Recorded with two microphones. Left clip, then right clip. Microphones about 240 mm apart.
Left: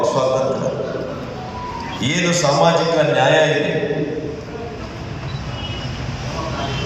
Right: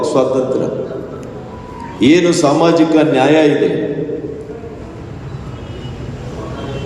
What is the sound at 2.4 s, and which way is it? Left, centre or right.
A man's voice, right.